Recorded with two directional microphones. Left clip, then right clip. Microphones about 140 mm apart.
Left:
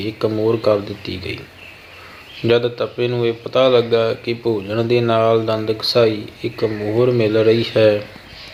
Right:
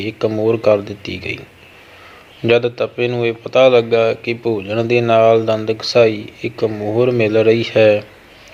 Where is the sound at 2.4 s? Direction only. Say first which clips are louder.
Right 2 dB; 15° right (ahead or behind).